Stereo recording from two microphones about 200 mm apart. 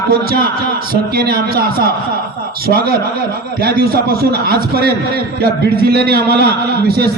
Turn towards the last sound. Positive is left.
turn(degrees=-50)  # may be behind; listen again after turning